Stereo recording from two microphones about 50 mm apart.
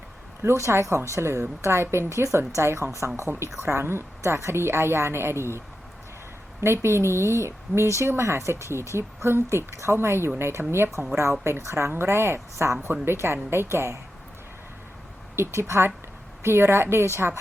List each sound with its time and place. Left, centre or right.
0.4 s speech: right
1.1 s speech: right
3.2 s speech: right
9.0 s speech: right
15.4 s speech: right